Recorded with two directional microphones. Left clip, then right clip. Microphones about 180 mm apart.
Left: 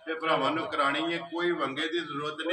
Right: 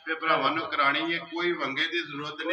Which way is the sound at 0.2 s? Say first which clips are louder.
Right 2 dB; 45° left (ahead or behind).